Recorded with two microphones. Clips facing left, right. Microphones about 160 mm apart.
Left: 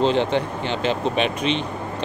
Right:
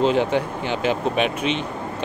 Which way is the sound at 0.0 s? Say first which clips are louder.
Even; 10° right (ahead or behind).